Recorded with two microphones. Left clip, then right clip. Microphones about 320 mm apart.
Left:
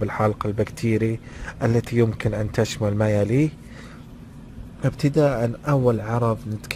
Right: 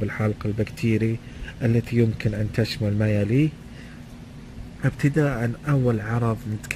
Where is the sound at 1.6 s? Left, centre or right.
Left.